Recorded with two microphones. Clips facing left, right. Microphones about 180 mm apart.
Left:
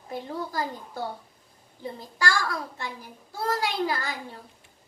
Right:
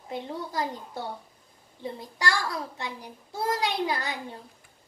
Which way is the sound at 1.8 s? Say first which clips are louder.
Left 1 dB; 20° right (ahead or behind).